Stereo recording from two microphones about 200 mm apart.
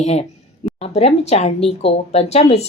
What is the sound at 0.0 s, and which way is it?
Speech, 35° left (ahead or behind).